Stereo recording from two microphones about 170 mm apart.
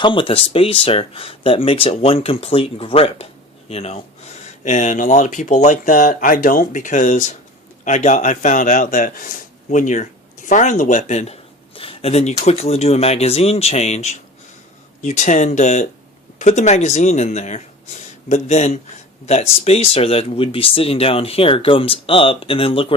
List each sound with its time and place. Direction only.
0.0 s speech: 30° left (ahead or behind)